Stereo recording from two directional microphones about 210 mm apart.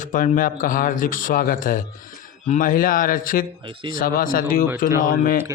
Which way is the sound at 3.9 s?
40° left (ahead or behind).